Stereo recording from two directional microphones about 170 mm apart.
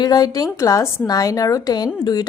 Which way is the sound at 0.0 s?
25° left (ahead or behind).